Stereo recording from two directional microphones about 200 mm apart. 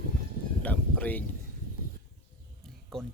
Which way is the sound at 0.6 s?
10° left (ahead or behind).